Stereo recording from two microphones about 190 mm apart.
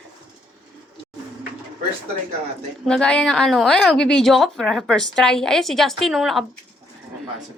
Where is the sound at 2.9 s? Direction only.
5° left (ahead or behind).